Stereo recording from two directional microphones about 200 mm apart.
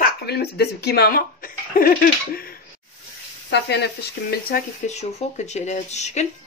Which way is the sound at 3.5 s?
55° left (ahead or behind).